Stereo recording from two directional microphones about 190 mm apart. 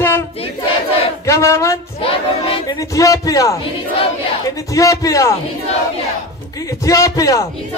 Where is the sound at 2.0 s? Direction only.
30° left (ahead or behind).